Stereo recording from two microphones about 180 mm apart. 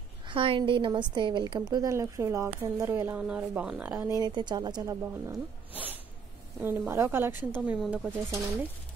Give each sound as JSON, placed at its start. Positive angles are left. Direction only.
{"t": 0.3, "sound": "a woman's voice", "side_deg": -30}
{"t": 4.1, "sound": "speech", "side_deg": -25}
{"t": 6.6, "sound": "a woman's voice", "side_deg": -10}